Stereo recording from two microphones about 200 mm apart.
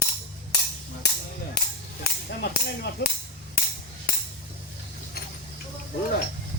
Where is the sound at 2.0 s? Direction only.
50° left (ahead or behind).